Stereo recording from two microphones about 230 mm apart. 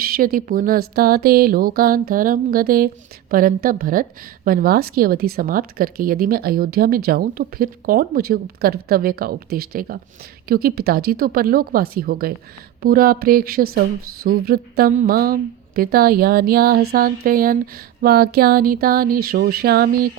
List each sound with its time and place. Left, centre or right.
0.0 s speech: right